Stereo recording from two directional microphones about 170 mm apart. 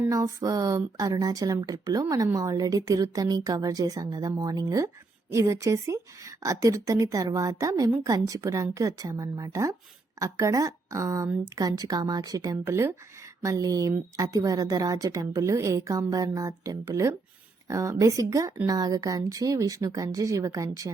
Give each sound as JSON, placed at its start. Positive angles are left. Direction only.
{"t": 0.1, "sound": "a woman's voice", "side_deg": -20}